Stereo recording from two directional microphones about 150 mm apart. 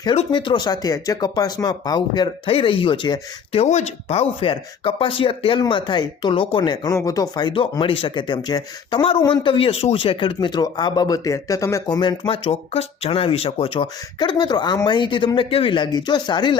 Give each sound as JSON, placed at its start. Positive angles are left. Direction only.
{"t": 0.3, "sound": "speech", "side_deg": 30}
{"t": 3.6, "sound": "speech", "side_deg": 50}